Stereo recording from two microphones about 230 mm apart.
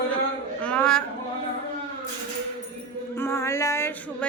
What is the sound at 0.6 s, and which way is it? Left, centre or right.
Speech, centre.